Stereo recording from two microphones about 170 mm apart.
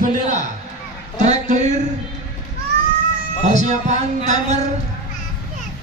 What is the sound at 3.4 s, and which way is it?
A man's voice, 45° right (ahead or behind).